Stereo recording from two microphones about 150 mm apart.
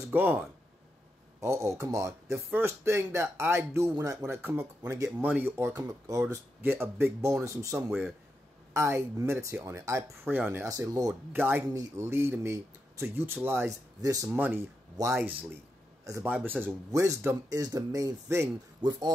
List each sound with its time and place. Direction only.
0.1 s speech: 10° right (ahead or behind)
1.4 s speech: 20° right (ahead or behind)
5.8 s a man's voice: 20° right (ahead or behind)
16.3 s speech: 10° right (ahead or behind)
16.6 s speech: 20° right (ahead or behind)